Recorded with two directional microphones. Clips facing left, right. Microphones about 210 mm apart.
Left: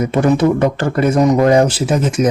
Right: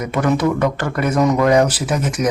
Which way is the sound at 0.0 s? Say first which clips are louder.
Left 4 dB; 30° left (ahead or behind).